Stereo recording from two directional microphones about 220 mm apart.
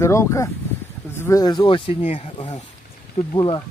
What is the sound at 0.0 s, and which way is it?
Speech, 15° left (ahead or behind).